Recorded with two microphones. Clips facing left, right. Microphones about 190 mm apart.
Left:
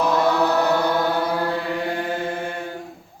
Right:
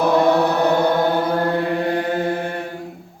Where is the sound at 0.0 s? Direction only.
60° right (ahead or behind).